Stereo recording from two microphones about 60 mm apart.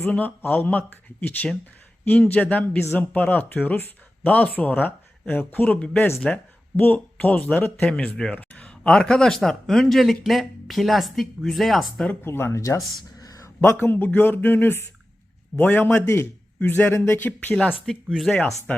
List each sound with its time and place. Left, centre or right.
0.0 s a man's voice: left
5.6 s speech: centre
7.8 s speech: centre
12.2 s a man's voice: left
12.5 s speech: left
13.1 s a sound: left
13.6 s a man's voice: left
17.9 s speech: centre